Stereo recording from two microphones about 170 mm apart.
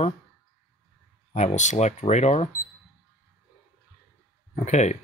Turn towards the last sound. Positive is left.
turn(degrees=45)  # may be behind; listen again after turning